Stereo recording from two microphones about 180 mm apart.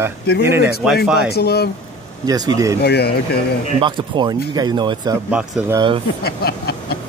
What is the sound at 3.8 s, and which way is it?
Speech, 25° right (ahead or behind).